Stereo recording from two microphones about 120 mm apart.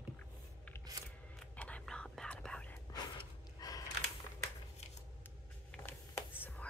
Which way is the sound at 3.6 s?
30° left (ahead or behind).